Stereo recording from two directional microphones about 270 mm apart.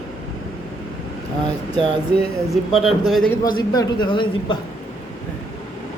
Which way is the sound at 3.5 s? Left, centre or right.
Centre.